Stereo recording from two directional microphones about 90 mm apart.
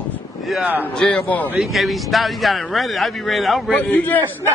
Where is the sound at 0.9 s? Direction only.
10° left (ahead or behind).